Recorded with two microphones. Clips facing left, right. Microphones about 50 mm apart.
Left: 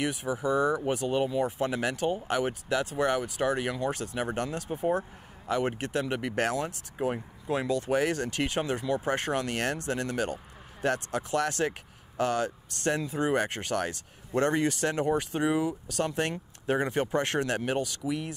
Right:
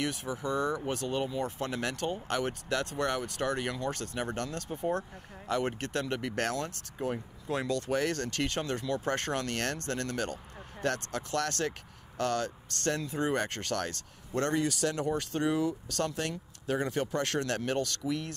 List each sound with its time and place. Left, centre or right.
0.0 s speech: centre
14.6 s speech: left
15.3 s speech: centre
16.2 s speech: left